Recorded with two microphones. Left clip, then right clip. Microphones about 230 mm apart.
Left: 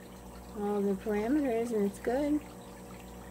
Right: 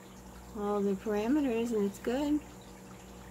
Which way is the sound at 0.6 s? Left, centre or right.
Centre.